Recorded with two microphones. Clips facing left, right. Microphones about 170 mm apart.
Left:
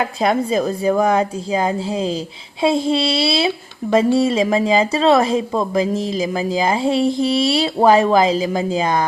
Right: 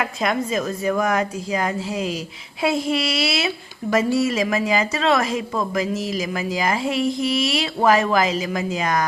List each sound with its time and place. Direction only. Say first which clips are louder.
0.0 s a woman's voice: left 5 dB; 30° left (ahead or behind)